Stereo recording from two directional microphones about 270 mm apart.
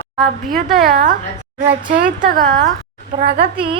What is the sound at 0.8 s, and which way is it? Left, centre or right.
A woman's voice, right.